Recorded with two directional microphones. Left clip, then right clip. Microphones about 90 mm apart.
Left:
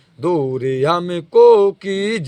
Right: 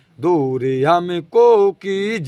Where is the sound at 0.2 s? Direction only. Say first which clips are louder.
Right 1 dB; 30° right (ahead or behind).